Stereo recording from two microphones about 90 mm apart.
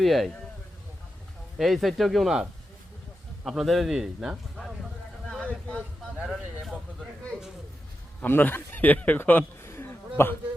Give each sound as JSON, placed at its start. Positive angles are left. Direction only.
{"t": 0.0, "sound": "a man's voice", "side_deg": 0}
{"t": 1.5, "sound": "a man's voice", "side_deg": 0}
{"t": 5.3, "sound": "a sound", "side_deg": 10}
{"t": 6.1, "sound": "a man's voice", "side_deg": 0}
{"t": 6.6, "sound": "a sound", "side_deg": 0}
{"t": 8.2, "sound": "speech", "side_deg": 20}